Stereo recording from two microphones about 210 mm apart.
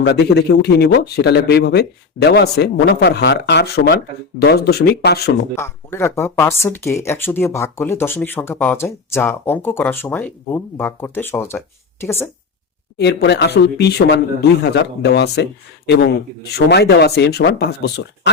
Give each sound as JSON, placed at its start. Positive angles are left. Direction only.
{"t": 0.0, "sound": "speech", "side_deg": 50}
{"t": 5.5, "sound": "speech", "side_deg": 10}
{"t": 13.0, "sound": "speech", "side_deg": 55}